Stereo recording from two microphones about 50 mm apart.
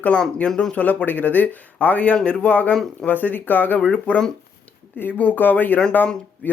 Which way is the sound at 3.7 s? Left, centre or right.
Left.